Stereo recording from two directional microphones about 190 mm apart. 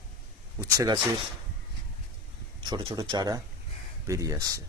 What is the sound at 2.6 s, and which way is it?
Speech, 25° right (ahead or behind).